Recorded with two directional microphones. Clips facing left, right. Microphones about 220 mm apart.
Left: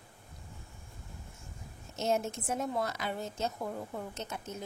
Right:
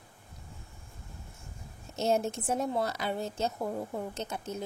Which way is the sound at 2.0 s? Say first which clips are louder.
Right 3 dB; 35° right (ahead or behind).